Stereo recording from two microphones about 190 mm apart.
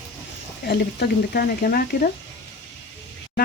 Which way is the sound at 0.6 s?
55° left (ahead or behind).